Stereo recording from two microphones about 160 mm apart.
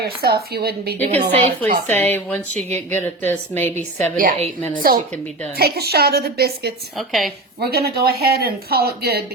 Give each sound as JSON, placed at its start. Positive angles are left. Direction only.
{"t": 0.0, "sound": "a woman's voice", "side_deg": -80}
{"t": 1.2, "sound": "a woman's voice", "side_deg": -60}
{"t": 1.9, "sound": "speech", "side_deg": 10}
{"t": 2.6, "sound": "speech", "side_deg": -45}
{"t": 2.9, "sound": "speech", "side_deg": 10}
{"t": 3.8, "sound": "a woman's voice", "side_deg": -55}
{"t": 5.5, "sound": "speech", "side_deg": -80}
{"t": 6.9, "sound": "a woman's voice", "side_deg": 0}
{"t": 7.6, "sound": "speech", "side_deg": -80}